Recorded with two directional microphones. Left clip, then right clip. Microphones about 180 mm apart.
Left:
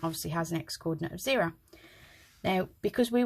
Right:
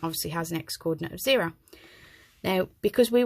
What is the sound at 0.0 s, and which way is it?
Speech, 40° right (ahead or behind).